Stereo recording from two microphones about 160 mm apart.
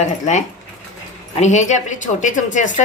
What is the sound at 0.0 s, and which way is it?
Speech, 45° left (ahead or behind).